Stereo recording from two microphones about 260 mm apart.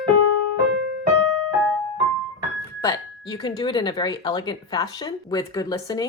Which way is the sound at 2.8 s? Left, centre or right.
Centre.